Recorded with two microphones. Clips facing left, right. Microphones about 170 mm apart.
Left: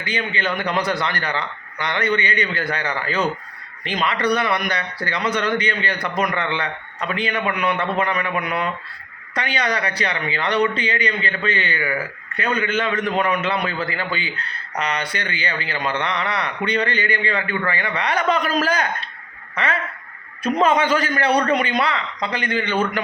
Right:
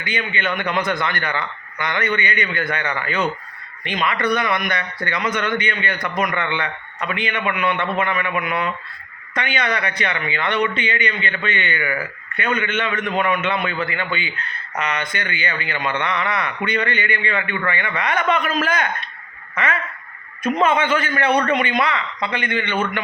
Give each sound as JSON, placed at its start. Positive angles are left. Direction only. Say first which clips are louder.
{"t": 0.0, "sound": "a man's voice", "louder": "even", "side_deg": 35}